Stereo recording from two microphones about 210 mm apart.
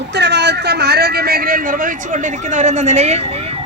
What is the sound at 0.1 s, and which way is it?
Speech, 55° right (ahead or behind).